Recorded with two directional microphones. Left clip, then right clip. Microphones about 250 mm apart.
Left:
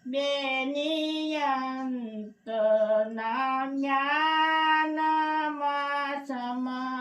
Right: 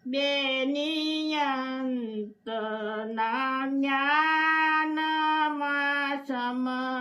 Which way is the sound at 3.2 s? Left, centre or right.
Centre.